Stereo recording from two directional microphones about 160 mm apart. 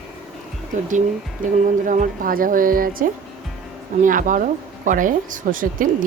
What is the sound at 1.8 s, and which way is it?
Speech, 55° right (ahead or behind).